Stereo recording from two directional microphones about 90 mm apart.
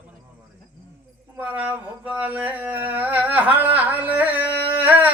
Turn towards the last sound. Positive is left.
turn(degrees=-20)  # may be behind; listen again after turning